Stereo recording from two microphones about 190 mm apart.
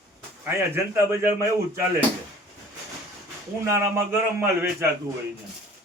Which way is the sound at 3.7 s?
15° right (ahead or behind).